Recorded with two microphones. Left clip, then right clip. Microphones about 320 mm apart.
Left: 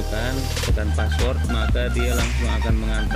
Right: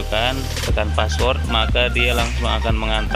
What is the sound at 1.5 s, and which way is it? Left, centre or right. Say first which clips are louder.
Speech: right 8 dB; right.